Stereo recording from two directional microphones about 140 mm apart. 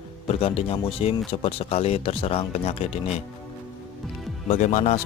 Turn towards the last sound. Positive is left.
turn(degrees=55)  # may be behind; listen again after turning